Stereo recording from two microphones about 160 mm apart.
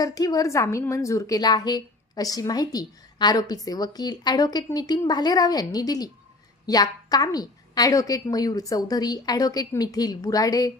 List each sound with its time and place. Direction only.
0.0 s a woman's voice: 25° left (ahead or behind)